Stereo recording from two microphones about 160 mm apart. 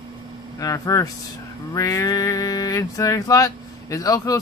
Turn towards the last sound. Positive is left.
turn(degrees=20)  # may be behind; listen again after turning